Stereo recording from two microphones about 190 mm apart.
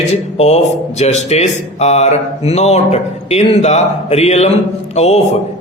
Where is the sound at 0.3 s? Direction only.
35° left (ahead or behind).